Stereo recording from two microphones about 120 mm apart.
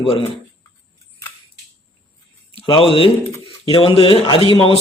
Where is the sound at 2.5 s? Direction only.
50° left (ahead or behind).